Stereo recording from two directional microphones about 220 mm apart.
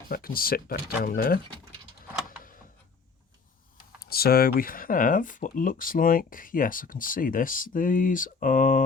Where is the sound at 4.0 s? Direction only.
45° left (ahead or behind).